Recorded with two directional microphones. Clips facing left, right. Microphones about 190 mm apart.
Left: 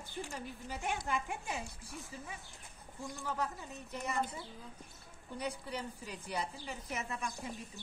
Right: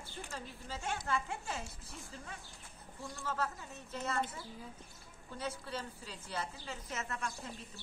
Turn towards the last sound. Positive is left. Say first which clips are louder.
# left 1 dB
turn(degrees=15)  # may be behind; listen again after turning